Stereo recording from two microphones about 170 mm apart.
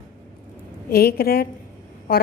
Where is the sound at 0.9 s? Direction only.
65° left (ahead or behind).